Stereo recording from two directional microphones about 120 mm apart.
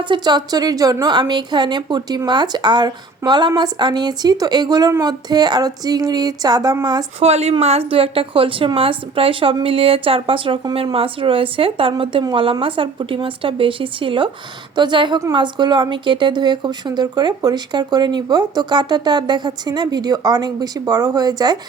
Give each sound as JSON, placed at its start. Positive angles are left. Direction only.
{"t": 0.0, "sound": "a woman's voice", "side_deg": -40}
{"t": 7.2, "sound": "a woman's voice", "side_deg": -60}